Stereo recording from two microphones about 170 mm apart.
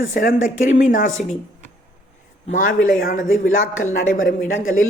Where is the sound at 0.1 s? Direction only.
55° left (ahead or behind).